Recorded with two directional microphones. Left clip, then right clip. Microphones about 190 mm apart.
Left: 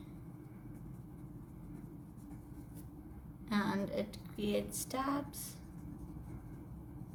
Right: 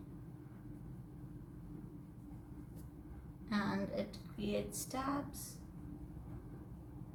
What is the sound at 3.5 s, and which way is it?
A woman's voice, 45° left (ahead or behind).